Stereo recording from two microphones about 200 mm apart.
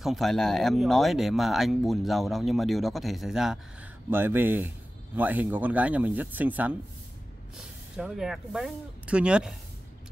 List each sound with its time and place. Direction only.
0.0 s speech: centre (ahead or behind)
7.9 s speech: 5° right (ahead or behind)